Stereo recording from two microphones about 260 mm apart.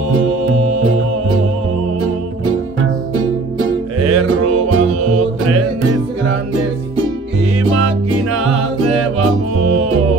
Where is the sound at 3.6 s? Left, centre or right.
Right.